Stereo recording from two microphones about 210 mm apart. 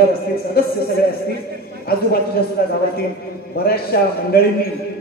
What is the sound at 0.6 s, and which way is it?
Speech, 50° left (ahead or behind).